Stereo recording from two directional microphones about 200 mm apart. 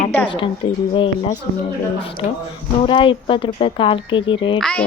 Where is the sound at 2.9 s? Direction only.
25° left (ahead or behind).